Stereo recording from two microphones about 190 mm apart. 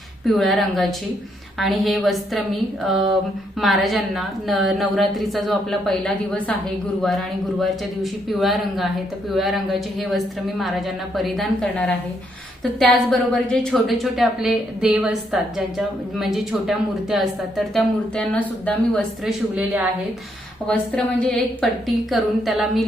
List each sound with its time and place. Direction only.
0.3 s speech: centre (ahead or behind)
20.7 s speech: 5° left (ahead or behind)